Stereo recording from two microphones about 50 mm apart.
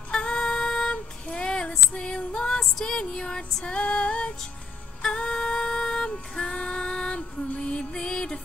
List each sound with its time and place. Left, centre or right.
0.1 s music: centre
1.2 s female singing: centre
3.5 s music: left
5.0 s female singing: centre